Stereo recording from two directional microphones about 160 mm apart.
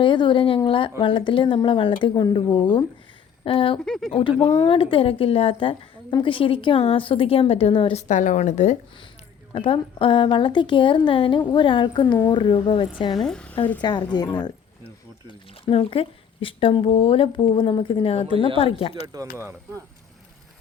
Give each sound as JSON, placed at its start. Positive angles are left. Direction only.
{"t": 0.0, "sound": "speech", "side_deg": 30}
{"t": 3.8, "sound": "speech", "side_deg": 5}
{"t": 4.1, "sound": "speech", "side_deg": 35}
{"t": 8.0, "sound": "speech", "side_deg": 50}
{"t": 9.5, "sound": "speech", "side_deg": 30}
{"t": 13.1, "sound": "a woman's voice", "side_deg": 5}
{"t": 13.8, "sound": "a woman's voice", "side_deg": 25}
{"t": 15.3, "sound": "speech", "side_deg": 35}
{"t": 19.0, "sound": "speech", "side_deg": -20}